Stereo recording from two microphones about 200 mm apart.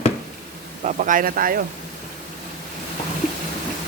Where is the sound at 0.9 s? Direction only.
40° right (ahead or behind).